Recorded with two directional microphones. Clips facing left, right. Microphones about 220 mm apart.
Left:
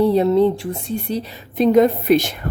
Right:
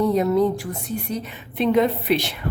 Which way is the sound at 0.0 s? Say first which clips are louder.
Left 4 dB; 30° left (ahead or behind).